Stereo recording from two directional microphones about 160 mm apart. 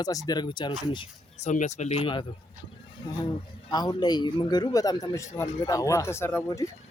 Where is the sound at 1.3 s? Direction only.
45° left (ahead or behind).